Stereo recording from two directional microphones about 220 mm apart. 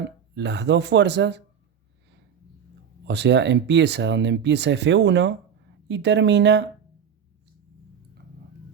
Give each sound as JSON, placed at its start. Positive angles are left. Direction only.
{"t": 0.3, "sound": "speech", "side_deg": -50}
{"t": 3.1, "sound": "speech", "side_deg": -50}